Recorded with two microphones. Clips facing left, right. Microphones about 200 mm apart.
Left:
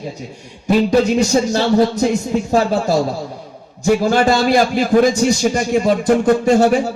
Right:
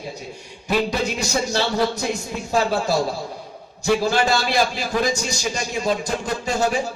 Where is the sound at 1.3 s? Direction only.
25° left (ahead or behind).